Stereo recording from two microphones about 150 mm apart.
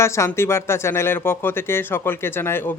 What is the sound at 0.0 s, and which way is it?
Speech, 20° left (ahead or behind).